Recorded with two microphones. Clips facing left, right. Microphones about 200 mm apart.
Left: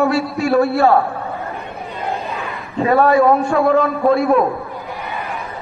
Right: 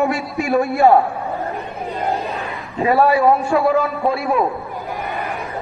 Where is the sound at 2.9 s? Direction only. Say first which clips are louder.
Left 2 dB; 10° right (ahead or behind).